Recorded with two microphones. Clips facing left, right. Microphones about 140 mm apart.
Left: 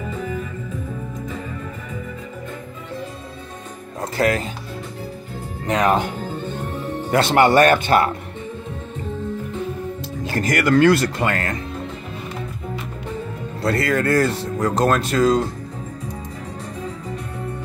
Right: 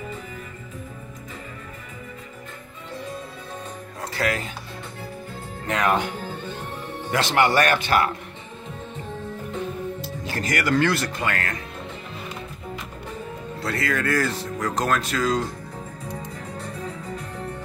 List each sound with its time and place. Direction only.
4.0 s music: 45° left (ahead or behind)
5.7 s speech: 25° left (ahead or behind)
7.1 s speech: 30° left (ahead or behind)
10.5 s speech: 45° left (ahead or behind)
13.6 s speech: 40° left (ahead or behind)